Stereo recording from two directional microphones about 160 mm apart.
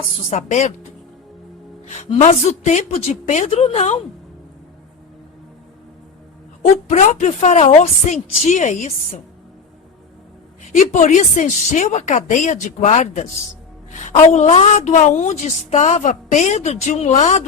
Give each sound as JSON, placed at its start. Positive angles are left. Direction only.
{"t": 0.3, "sound": "a woman's voice", "side_deg": 45}
{"t": 2.0, "sound": "a woman's voice", "side_deg": 45}
{"t": 6.8, "sound": "a woman's voice", "side_deg": 50}
{"t": 10.7, "sound": "a woman's voice", "side_deg": 50}